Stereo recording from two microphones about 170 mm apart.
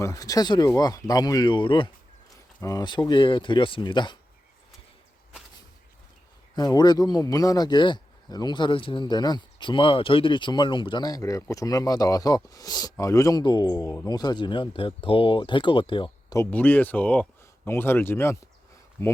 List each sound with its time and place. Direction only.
0.0 s speech: 20° left (ahead or behind)
6.6 s speech: 25° left (ahead or behind)
16.4 s speech: 10° left (ahead or behind)